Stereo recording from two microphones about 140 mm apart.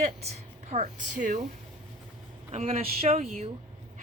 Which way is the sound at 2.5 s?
50° right (ahead or behind).